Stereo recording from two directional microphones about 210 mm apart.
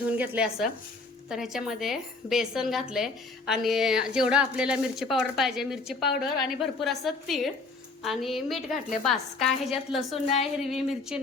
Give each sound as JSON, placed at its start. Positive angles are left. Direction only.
{"t": 0.2, "sound": "speech", "side_deg": -5}